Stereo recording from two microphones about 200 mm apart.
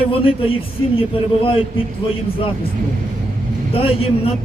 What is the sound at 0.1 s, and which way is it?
Speech, 25° left (ahead or behind).